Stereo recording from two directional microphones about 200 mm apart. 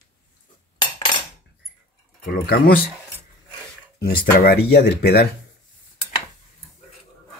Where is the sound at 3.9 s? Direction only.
50° left (ahead or behind).